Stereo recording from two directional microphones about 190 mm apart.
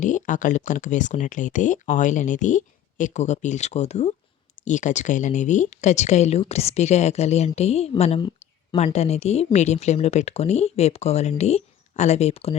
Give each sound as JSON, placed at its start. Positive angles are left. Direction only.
{"t": 0.0, "sound": "speech", "side_deg": 40}